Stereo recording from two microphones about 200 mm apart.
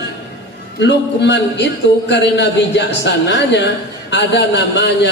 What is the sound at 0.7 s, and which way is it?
Speech, 60° left (ahead or behind).